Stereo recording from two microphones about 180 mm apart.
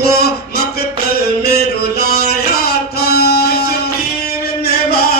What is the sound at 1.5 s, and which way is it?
Music, 60° left (ahead or behind).